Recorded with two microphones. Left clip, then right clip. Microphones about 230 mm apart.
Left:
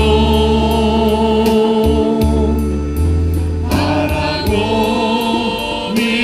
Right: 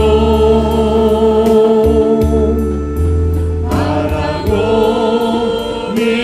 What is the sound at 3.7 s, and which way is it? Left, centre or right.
Music, left.